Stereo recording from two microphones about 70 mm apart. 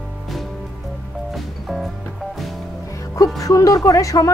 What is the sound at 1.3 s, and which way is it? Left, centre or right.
Music, centre.